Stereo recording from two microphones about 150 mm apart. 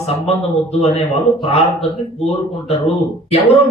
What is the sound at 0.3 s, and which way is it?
Speech, 45° left (ahead or behind).